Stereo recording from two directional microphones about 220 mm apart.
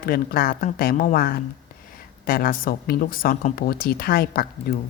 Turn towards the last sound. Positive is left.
turn(degrees=45)  # may be behind; listen again after turning